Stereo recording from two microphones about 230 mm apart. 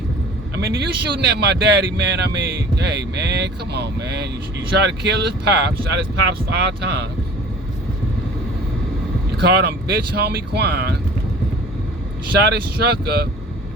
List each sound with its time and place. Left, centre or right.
0.5 s speech: right
9.4 s speech: right
12.5 s speech: right